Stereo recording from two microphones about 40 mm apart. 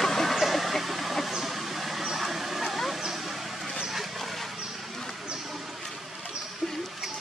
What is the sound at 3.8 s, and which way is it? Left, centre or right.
Dog, centre.